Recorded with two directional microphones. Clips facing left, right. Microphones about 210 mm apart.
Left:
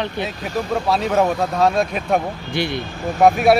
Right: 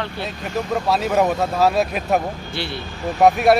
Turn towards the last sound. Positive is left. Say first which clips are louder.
# left 1 dB
turn(degrees=0)  # may be behind; listen again after turning